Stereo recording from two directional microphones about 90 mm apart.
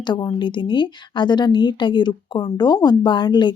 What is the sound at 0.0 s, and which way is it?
Speech, 55° left (ahead or behind).